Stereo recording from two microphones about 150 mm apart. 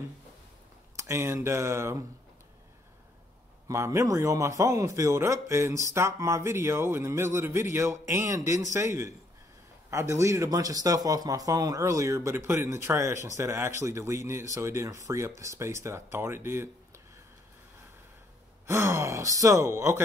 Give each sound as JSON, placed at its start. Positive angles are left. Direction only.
{"t": 0.9, "sound": "speech", "side_deg": -20}
{"t": 3.6, "sound": "a man's voice", "side_deg": -20}
{"t": 18.7, "sound": "a man's voice", "side_deg": -20}